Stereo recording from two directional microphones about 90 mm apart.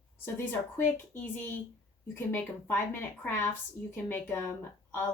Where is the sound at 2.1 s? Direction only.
25° left (ahead or behind).